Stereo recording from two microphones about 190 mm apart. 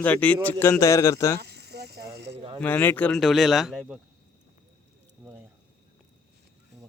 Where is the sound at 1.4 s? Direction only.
60° right (ahead or behind).